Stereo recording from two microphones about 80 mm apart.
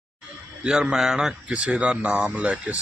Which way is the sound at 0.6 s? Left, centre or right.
Centre.